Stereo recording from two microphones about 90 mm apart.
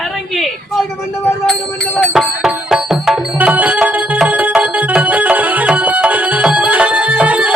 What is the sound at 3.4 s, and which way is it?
Music, 15° right (ahead or behind).